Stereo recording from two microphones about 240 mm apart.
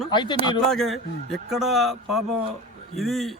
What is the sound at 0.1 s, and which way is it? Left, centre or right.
Speech, centre.